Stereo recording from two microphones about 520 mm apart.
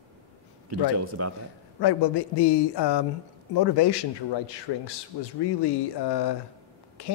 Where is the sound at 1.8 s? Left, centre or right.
Left.